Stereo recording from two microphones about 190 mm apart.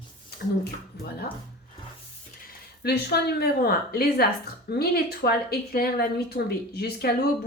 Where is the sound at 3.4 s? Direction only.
55° left (ahead or behind).